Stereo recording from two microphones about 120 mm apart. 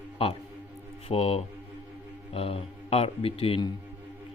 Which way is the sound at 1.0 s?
55° left (ahead or behind).